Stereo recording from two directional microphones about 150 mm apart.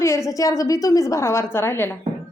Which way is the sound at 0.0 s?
20° left (ahead or behind).